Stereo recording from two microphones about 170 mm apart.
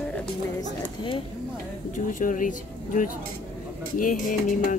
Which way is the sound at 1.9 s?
50° left (ahead or behind).